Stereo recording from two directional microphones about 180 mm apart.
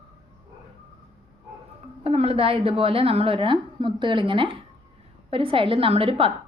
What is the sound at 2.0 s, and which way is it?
A woman's voice, 35° right (ahead or behind).